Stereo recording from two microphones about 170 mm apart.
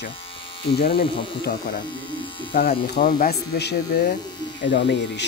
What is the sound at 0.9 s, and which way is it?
Speech, 60° left (ahead or behind).